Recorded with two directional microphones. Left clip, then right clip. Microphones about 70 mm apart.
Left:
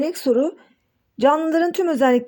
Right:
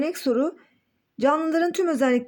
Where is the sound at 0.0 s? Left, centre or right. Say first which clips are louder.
Left 4 dB; left.